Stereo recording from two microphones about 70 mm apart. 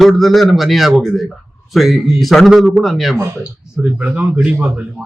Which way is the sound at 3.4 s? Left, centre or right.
Centre.